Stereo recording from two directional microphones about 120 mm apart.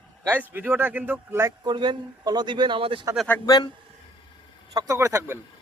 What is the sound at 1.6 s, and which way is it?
A man's voice, 40° right (ahead or behind).